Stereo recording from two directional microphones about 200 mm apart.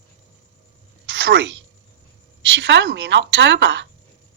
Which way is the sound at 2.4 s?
65° right (ahead or behind).